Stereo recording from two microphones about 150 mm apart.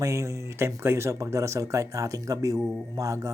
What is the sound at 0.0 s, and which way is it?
Speech, 20° right (ahead or behind).